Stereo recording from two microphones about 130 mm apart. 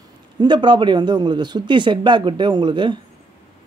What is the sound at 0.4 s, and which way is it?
A man's voice, 35° right (ahead or behind).